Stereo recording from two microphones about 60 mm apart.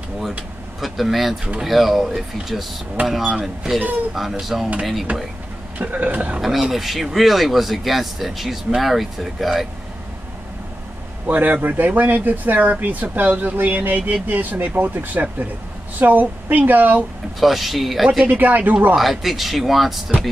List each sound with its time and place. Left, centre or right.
0.7 s speech: centre
5.8 s speech: right
6.4 s speech: centre
11.2 s speech: right
17.4 s speech: centre
18.2 s speech: right
18.9 s speech: centre